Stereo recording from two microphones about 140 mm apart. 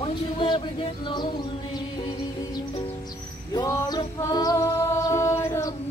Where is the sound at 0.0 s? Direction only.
40° left (ahead or behind).